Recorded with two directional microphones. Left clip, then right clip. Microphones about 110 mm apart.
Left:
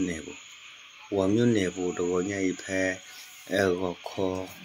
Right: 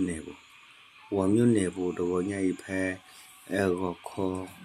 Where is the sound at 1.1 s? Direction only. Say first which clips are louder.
Even; 20° right (ahead or behind).